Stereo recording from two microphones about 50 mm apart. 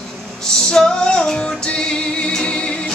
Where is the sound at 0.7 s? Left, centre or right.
Centre.